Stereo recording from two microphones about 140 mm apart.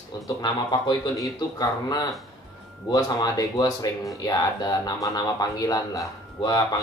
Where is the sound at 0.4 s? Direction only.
30° left (ahead or behind).